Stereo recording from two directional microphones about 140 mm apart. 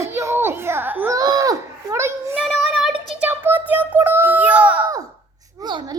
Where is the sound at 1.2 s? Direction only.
25° right (ahead or behind).